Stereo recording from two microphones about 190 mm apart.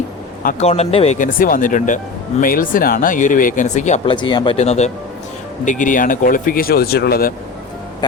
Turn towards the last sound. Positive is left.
turn(degrees=50)  # may be behind; listen again after turning